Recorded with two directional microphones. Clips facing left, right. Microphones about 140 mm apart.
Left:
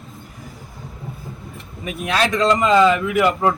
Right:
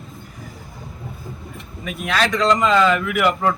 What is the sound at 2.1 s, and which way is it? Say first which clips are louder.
Speech: left 1 dB; 15° left (ahead or behind).